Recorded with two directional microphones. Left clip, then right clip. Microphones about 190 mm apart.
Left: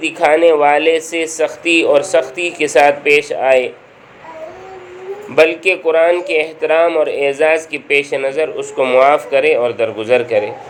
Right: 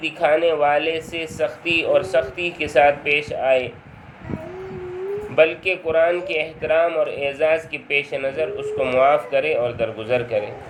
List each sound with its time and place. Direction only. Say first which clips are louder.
0.0 s a man's voice: left 7 dB; 30° left (ahead or behind)
5.4 s a man's voice: left 6 dB; 30° left (ahead or behind)